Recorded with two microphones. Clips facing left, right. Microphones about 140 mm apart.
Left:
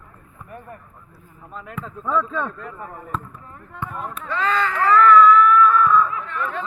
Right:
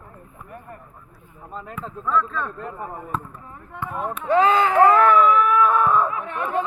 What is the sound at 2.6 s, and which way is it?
Speech, 30° right (ahead or behind).